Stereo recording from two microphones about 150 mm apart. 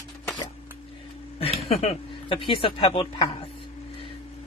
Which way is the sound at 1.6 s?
45° left (ahead or behind).